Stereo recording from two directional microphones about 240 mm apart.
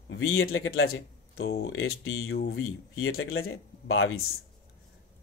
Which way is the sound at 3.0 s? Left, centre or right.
Left.